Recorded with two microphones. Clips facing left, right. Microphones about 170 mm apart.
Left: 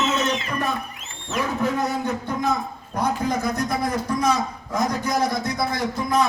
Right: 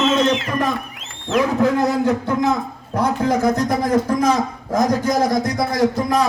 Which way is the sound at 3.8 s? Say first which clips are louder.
Right 6 dB; 90° right.